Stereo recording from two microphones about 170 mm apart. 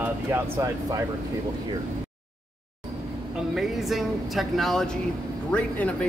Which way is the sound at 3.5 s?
Centre (ahead or behind).